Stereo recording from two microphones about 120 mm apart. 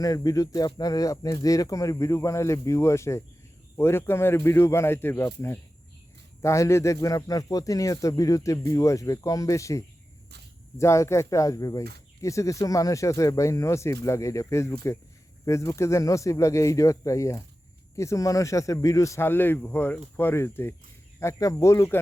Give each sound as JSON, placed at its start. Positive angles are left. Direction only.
{"t": 0.0, "sound": "speech", "side_deg": 30}